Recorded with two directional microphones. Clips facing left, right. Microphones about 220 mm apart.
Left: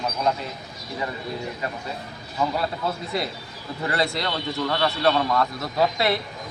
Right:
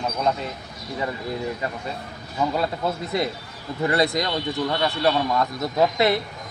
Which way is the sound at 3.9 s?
20° right (ahead or behind).